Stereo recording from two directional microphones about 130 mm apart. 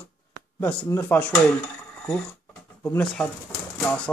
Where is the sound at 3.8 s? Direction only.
10° left (ahead or behind).